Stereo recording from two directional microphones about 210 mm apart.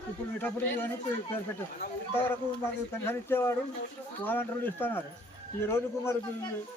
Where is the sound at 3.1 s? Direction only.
10° left (ahead or behind).